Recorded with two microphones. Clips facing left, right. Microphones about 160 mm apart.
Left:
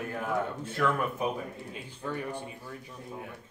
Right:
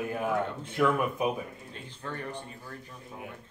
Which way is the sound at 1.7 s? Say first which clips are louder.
Left 4 dB; 10° left (ahead or behind).